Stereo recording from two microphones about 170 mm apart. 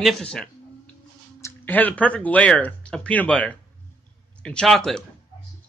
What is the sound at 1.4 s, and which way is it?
A man's voice, 10° left (ahead or behind).